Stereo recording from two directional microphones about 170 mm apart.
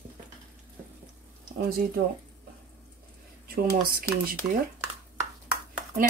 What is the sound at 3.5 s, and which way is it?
Speech, 60° right (ahead or behind).